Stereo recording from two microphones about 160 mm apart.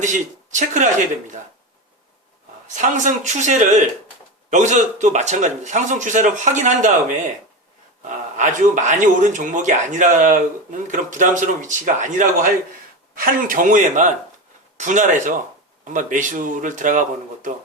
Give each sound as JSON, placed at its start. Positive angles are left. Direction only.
{"t": 0.0, "sound": "a man's voice", "side_deg": -50}
{"t": 2.7, "sound": "a man's voice", "side_deg": -50}
{"t": 8.4, "sound": "a man's voice", "side_deg": -50}